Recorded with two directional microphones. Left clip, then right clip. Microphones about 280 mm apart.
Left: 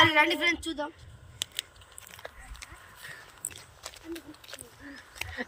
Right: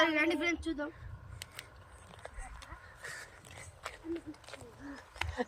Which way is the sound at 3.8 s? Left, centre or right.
Left.